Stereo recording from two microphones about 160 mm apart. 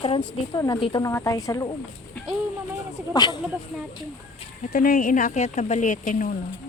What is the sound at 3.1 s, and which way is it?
Speech, 25° left (ahead or behind).